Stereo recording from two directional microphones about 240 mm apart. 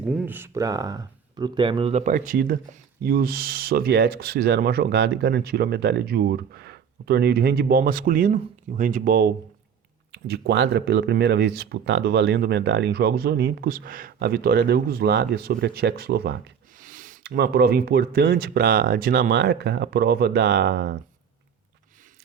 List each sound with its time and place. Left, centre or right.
0.1 s speech: centre; by 20.9 s right